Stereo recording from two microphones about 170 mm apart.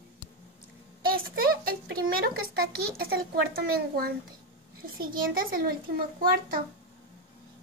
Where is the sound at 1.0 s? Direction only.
60° right (ahead or behind).